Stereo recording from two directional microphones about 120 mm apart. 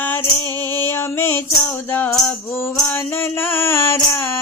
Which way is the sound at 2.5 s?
20° left (ahead or behind).